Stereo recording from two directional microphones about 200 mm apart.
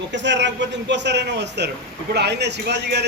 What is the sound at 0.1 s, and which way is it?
A man's voice, 60° right (ahead or behind).